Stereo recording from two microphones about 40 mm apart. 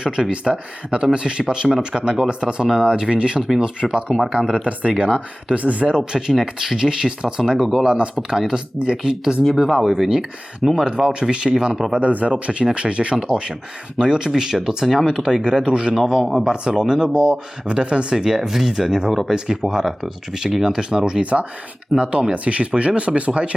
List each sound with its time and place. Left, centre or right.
0.0 s speech: right
6.0 s speech: centre
7.5 s speech: centre
7.9 s speech: right
9.6 s speech: centre
9.8 s speech: centre
11.9 s speech: right
14.0 s speech: centre
15.4 s speech: right; by 20.7 s centre
20.7 s speech: centre
21.9 s speech: right